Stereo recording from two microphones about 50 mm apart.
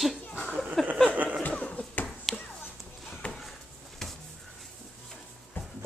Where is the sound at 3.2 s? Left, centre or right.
Left.